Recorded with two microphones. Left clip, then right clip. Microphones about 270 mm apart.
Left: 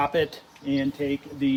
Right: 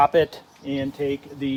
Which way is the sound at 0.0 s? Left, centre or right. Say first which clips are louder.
Right 6 dB; centre.